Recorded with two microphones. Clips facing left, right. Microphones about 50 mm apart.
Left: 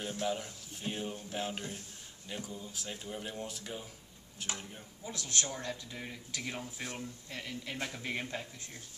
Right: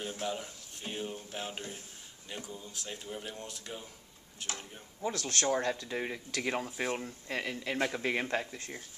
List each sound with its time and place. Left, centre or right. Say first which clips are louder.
0.2 s speech: left 1 dB; centre
5.0 s a man's voice: right 5 dB; right
5.5 s speech: right 9 dB; right